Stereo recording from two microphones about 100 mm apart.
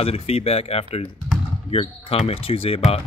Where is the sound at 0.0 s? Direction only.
80° left.